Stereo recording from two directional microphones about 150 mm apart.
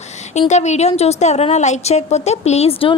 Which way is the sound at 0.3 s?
50° left (ahead or behind).